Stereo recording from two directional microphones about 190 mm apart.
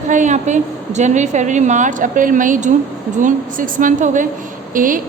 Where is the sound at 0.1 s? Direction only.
40° right (ahead or behind).